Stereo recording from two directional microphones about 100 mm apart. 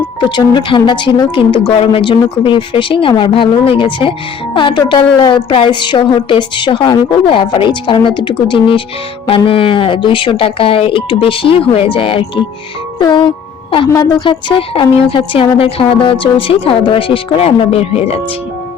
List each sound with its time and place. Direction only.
0.2 s a woman's voice: 50° left (ahead or behind)
13.0 s speech: 50° left (ahead or behind)
13.9 s a woman's voice: 40° left (ahead or behind)
14.3 s a woman's voice: 60° left (ahead or behind); by 18.2 s 90° left